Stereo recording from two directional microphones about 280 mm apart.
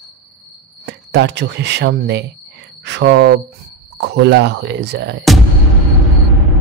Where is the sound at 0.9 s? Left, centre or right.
Right.